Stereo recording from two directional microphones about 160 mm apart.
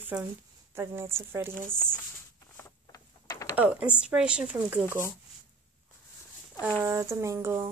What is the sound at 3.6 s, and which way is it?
Speech, 10° right (ahead or behind).